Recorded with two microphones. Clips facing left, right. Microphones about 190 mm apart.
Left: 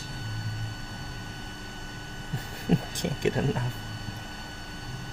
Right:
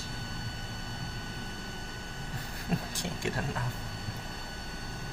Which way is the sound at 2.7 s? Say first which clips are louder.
Left 8 dB; 20° left (ahead or behind).